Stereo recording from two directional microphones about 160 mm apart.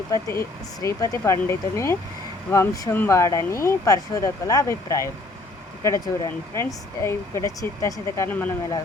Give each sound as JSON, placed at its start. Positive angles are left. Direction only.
{"t": 0.1, "sound": "speech", "side_deg": 20}